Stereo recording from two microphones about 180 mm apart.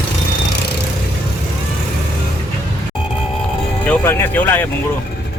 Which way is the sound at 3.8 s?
10° left (ahead or behind).